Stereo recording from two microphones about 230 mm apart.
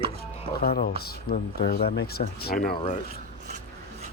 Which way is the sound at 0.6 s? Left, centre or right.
Left.